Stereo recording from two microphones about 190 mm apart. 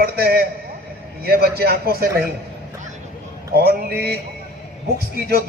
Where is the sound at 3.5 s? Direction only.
55° right (ahead or behind).